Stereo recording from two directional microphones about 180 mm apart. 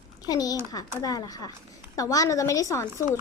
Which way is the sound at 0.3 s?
20° left (ahead or behind).